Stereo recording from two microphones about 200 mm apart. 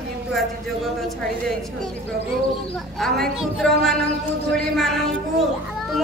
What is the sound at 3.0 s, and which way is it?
Speech, centre (ahead or behind).